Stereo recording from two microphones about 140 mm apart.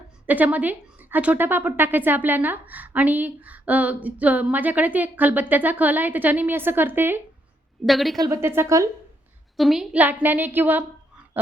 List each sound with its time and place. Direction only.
0.3 s speech: 10° right (ahead or behind)
7.9 s a woman's voice: centre (ahead or behind)
8.2 s a woman's voice: 20° right (ahead or behind)
9.6 s speech: centre (ahead or behind)